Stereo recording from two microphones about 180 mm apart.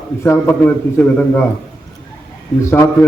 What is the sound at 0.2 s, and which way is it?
A man's voice, 10° left (ahead or behind).